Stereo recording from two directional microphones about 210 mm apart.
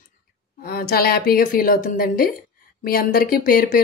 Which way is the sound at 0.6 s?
45° left (ahead or behind).